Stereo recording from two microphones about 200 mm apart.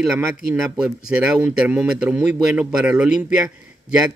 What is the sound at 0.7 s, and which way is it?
Speech, 5° right (ahead or behind).